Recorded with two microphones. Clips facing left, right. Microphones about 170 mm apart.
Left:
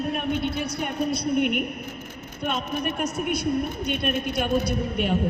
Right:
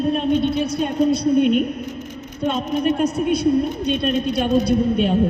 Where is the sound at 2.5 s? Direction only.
30° right (ahead or behind).